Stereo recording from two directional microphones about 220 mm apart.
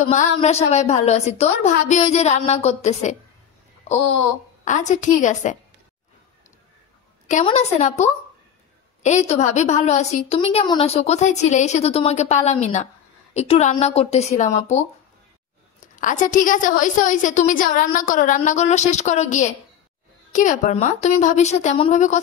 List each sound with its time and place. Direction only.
0.0 s a woman's voice: 30° left (ahead or behind)
7.2 s a woman's voice: 30° left (ahead or behind)
16.0 s a woman's voice: 35° left (ahead or behind)